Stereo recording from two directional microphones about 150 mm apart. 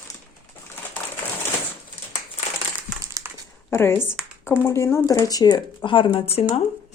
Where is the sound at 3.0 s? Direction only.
20° right (ahead or behind).